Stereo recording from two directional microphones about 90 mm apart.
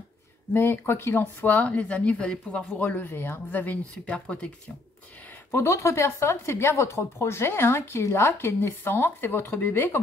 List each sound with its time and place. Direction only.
0.5 s a woman's voice: 25° left (ahead or behind)
5.5 s a woman's voice: 30° left (ahead or behind)